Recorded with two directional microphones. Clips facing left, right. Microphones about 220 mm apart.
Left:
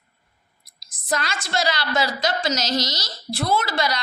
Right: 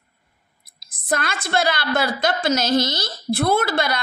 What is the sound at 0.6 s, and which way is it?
A woman's voice, 55° right (ahead or behind).